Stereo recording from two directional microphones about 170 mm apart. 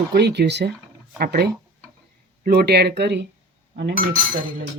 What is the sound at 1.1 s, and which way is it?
Speech, 70° right (ahead or behind).